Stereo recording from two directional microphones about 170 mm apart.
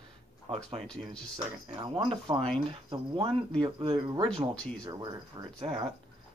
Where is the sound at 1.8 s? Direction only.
30° right (ahead or behind).